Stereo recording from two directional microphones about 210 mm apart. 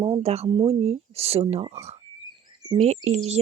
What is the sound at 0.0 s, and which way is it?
Speech, 25° right (ahead or behind).